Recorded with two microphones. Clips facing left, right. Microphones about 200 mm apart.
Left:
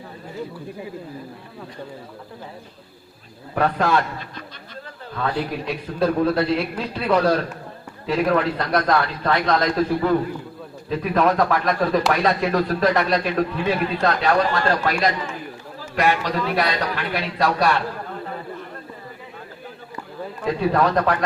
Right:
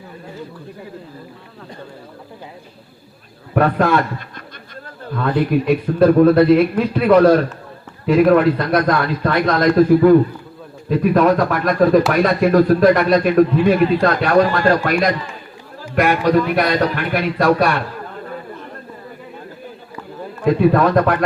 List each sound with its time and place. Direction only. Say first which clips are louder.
3.5 s a man's voice: right 5 dB; 55° right (ahead or behind)
20.4 s speech: right 6 dB; 55° right (ahead or behind)